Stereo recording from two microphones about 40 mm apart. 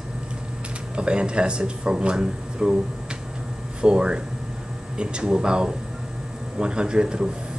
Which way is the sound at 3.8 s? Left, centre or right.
Right.